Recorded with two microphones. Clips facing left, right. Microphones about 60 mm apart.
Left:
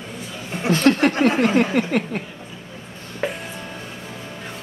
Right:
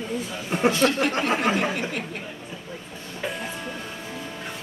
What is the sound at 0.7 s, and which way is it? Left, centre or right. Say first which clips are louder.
Speech: left 4 dB; left.